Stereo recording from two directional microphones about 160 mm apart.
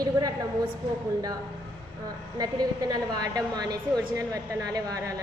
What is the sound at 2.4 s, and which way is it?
A woman's voice, 25° right (ahead or behind).